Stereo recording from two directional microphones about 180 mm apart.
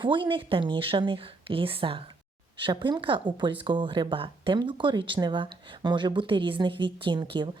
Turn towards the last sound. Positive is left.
turn(degrees=-25)  # may be behind; listen again after turning